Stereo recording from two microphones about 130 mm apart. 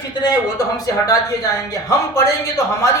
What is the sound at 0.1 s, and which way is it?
Speech, 35° left (ahead or behind).